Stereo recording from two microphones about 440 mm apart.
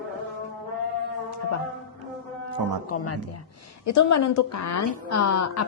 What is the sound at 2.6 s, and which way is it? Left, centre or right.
Speech, right.